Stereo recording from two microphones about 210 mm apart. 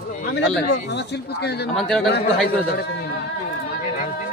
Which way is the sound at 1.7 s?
Centre (ahead or behind).